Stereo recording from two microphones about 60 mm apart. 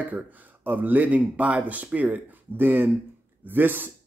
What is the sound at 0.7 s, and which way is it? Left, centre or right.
Speech, right.